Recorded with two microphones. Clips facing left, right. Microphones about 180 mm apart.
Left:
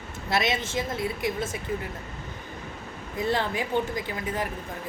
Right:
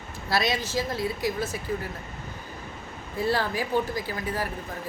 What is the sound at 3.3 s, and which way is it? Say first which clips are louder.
Speech: even; 20° left (ahead or behind).